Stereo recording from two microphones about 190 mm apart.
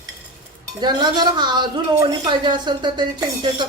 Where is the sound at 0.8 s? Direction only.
20° right (ahead or behind).